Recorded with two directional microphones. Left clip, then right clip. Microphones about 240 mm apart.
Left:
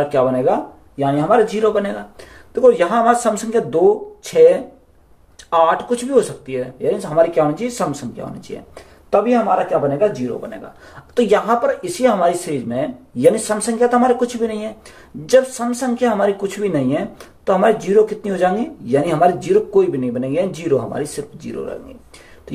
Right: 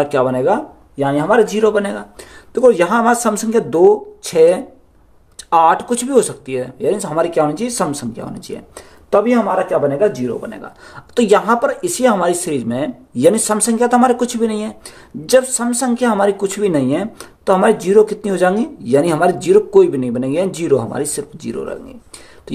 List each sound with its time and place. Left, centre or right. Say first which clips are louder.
0.0 s a woman's voice: right 1 dB; right